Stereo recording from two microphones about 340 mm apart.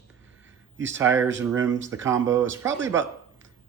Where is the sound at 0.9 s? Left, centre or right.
Centre.